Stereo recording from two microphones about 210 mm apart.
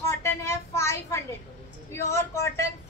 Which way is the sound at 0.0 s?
15° left (ahead or behind).